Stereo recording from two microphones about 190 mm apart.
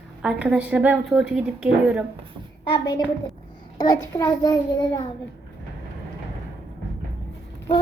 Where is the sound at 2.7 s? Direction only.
20° left (ahead or behind).